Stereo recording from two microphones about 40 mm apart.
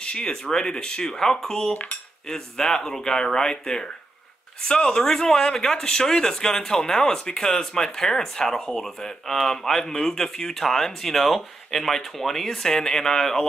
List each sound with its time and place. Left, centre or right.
0.0 s speech: left
1.7 s cutlery: left
2.2 s speech: centre